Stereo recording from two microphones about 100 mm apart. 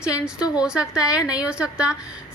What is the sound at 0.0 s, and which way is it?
A woman's voice, 10° right (ahead or behind).